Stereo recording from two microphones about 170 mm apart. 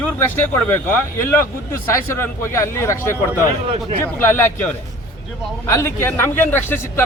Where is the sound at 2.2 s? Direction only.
15° left (ahead or behind).